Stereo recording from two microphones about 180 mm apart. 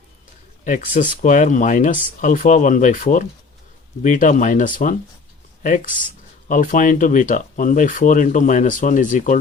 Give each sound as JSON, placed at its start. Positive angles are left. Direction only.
{"t": 0.6, "sound": "speech", "side_deg": 45}